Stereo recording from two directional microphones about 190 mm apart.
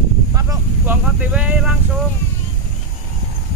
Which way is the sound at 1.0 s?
5° right (ahead or behind).